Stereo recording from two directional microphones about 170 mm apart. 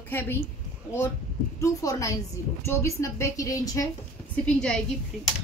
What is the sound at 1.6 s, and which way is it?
A woman's voice, 20° left (ahead or behind).